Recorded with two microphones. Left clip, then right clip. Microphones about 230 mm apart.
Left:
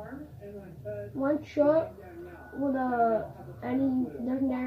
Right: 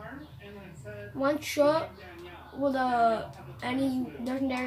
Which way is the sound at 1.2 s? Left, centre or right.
Right.